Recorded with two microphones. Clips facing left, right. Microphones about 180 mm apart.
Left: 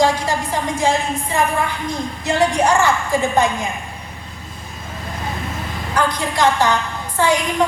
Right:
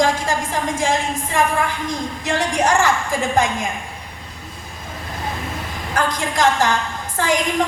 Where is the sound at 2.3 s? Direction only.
45° right (ahead or behind).